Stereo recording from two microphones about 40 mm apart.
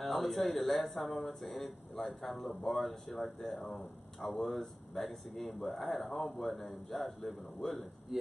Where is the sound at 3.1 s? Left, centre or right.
Centre.